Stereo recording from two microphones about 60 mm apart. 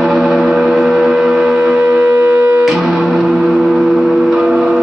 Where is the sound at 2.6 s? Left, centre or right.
Centre.